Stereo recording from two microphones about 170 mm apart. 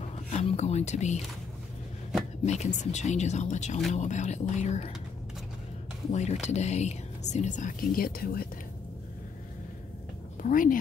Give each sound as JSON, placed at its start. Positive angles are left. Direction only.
{"t": 0.3, "sound": "speech", "side_deg": 40}
{"t": 2.4, "sound": "speech", "side_deg": 45}
{"t": 6.4, "sound": "speech", "side_deg": 40}
{"t": 10.4, "sound": "speech", "side_deg": 55}